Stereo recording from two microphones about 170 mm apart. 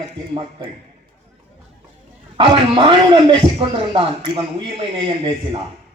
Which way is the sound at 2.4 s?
30° right (ahead or behind).